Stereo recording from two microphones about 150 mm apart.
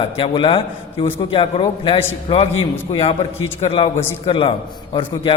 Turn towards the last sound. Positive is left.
turn(degrees=35)  # may be behind; listen again after turning